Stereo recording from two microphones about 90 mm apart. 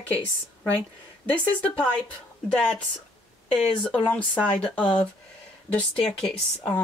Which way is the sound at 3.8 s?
15° left (ahead or behind).